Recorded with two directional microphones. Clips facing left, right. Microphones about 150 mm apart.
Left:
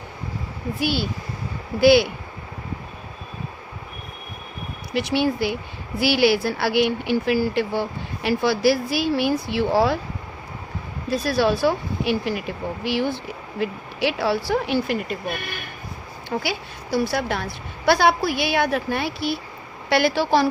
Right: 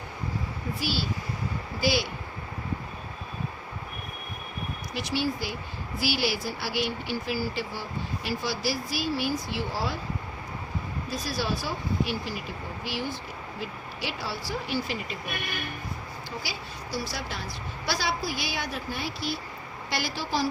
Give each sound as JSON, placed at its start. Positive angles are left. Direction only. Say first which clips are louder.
{"t": 0.8, "sound": "speech", "louder": "left 7 dB", "side_deg": 60}
{"t": 4.9, "sound": "speech", "louder": "left 8 dB", "side_deg": 65}
{"t": 11.1, "sound": "speech", "louder": "left 11 dB", "side_deg": 65}
{"t": 16.3, "sound": "speech", "louder": "left 12 dB", "side_deg": 60}